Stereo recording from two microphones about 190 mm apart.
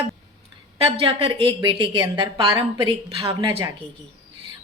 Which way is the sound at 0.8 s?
30° right (ahead or behind).